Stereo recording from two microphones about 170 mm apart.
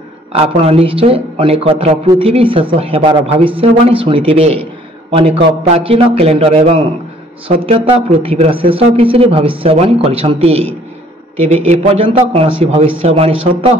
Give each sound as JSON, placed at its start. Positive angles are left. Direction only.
{"t": 0.3, "sound": "speech", "side_deg": -35}